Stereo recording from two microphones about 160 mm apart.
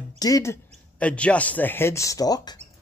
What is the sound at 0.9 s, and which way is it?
Speech, 10° left (ahead or behind).